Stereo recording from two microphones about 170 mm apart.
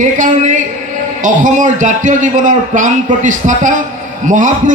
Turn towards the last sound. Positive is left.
turn(degrees=-50)  # may be behind; listen again after turning